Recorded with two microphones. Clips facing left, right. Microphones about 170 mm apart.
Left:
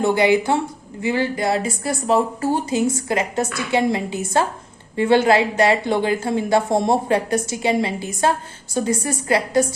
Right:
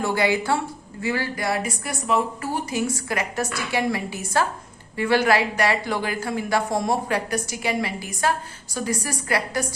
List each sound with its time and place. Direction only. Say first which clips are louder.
0.0 s speech: left 6 dB; 20° left (ahead or behind)